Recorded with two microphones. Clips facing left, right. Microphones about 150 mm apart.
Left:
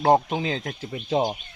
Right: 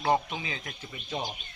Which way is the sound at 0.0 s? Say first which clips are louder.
Left 8 dB; 55° left (ahead or behind).